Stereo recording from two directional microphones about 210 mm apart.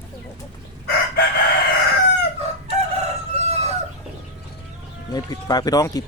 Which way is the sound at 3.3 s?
30° right (ahead or behind).